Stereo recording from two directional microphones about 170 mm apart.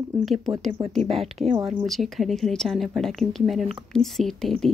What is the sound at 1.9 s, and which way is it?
Speech, centre (ahead or behind).